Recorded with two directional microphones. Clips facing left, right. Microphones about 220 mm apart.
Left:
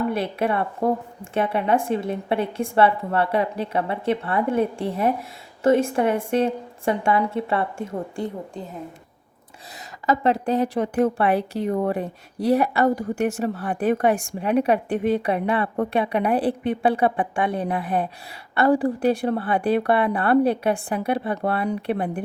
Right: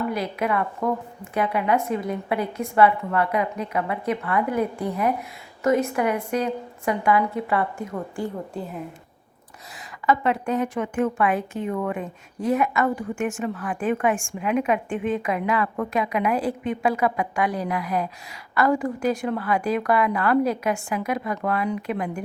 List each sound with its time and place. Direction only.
0.1 s a woman's voice: 30° left (ahead or behind)
9.7 s a woman's voice: 40° left (ahead or behind)